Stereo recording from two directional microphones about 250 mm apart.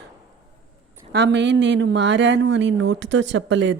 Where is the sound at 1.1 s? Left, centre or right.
Right.